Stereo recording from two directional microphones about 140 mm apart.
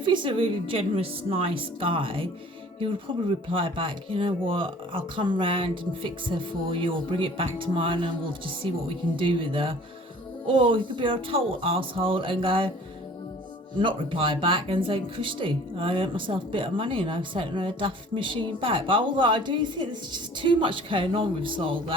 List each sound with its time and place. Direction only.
0.0 s speech: 35° right (ahead or behind)
13.8 s speech: 40° right (ahead or behind)